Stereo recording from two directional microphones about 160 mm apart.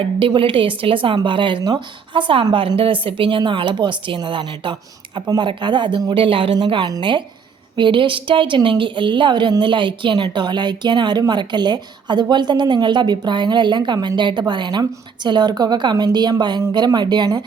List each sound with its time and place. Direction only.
0.0 s a woman's voice: 35° right (ahead or behind)